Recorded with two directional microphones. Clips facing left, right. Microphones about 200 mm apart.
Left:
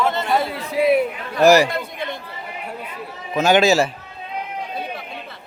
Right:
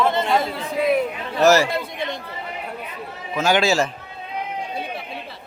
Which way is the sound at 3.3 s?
20° left (ahead or behind).